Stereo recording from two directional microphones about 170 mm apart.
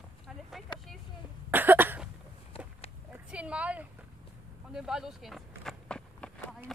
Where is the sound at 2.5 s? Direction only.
35° left (ahead or behind).